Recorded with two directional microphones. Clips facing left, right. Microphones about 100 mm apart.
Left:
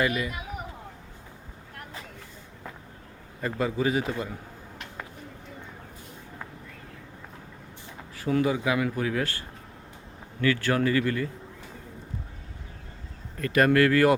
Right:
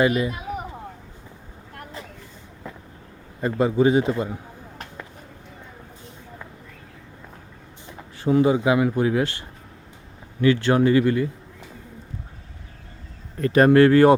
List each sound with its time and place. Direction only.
0.0 s speech: 25° right (ahead or behind)
3.4 s speech: 30° right (ahead or behind)
8.2 s speech: 25° right (ahead or behind)
10.4 s speech: 25° right (ahead or behind)
13.4 s speech: 30° right (ahead or behind)